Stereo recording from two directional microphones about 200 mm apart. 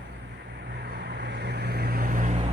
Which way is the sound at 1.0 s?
55° right (ahead or behind).